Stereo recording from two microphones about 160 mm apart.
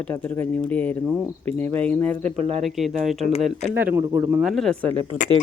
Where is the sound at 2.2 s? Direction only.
45° right (ahead or behind).